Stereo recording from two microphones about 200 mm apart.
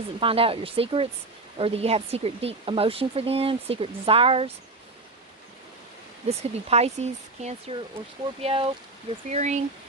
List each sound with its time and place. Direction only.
0.2 s speech: 25° right (ahead or behind)
6.2 s speech: 30° right (ahead or behind)